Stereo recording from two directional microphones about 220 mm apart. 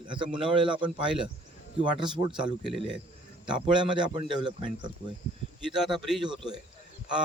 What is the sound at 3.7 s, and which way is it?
A man's voice, 20° right (ahead or behind).